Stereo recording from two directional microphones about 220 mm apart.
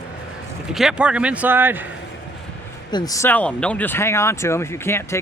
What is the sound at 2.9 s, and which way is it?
Speech, 20° left (ahead or behind).